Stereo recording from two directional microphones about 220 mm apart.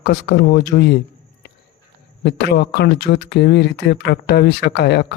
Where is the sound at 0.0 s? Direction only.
55° left (ahead or behind).